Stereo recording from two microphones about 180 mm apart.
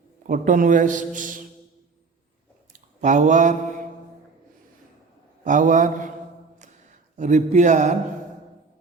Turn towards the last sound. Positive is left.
turn(degrees=-40)  # may be behind; listen again after turning